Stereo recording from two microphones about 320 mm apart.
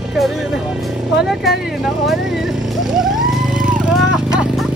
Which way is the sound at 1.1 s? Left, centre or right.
Centre.